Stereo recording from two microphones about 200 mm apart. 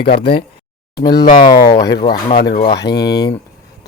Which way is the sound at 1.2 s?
25° left (ahead or behind).